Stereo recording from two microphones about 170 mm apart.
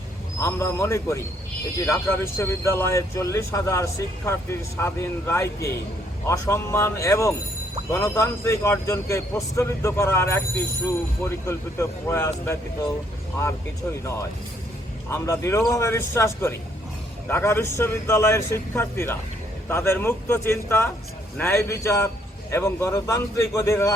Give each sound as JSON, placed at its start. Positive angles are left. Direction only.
{"t": 0.3, "sound": "speech", "side_deg": 15}
{"t": 14.0, "sound": "speech", "side_deg": 15}